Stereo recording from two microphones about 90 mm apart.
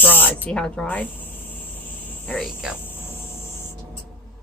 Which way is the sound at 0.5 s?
10° left (ahead or behind).